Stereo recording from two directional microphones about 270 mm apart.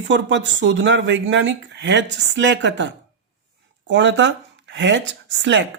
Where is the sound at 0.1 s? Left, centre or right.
Right.